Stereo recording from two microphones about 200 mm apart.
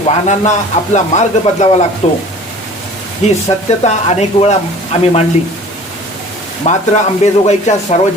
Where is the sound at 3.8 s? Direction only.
35° left (ahead or behind).